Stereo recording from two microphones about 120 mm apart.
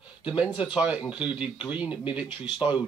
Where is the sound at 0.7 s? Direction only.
10° right (ahead or behind).